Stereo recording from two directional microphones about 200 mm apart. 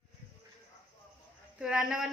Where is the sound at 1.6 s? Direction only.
5° right (ahead or behind).